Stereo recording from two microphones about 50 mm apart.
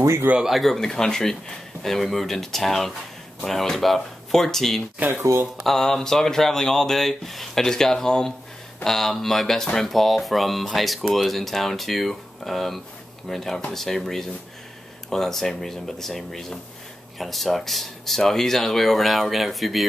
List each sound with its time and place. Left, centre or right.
0.4 s speech: centre
0.7 s speech: centre
4.9 s speech: right
5.6 s speech: centre